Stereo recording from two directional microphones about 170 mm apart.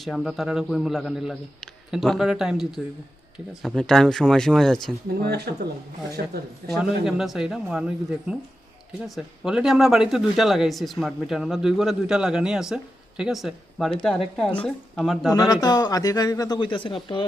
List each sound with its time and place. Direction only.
0.0 s speech: centre (ahead or behind)
5.2 s speech: 70° right (ahead or behind)
6.2 s speech: 60° right (ahead or behind)
6.7 s speech: centre (ahead or behind)
15.3 s speech: 20° left (ahead or behind)